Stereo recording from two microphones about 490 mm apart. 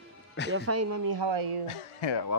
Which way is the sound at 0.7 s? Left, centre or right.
Right.